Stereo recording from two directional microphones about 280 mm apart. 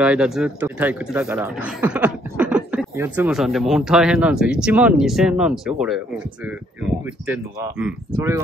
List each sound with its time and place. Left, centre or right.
0.0 s speech: centre
7.8 s speech: centre